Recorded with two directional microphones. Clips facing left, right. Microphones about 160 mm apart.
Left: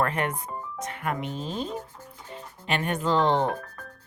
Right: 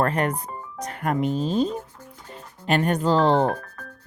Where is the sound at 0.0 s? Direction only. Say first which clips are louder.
Right 4 dB; 35° right (ahead or behind).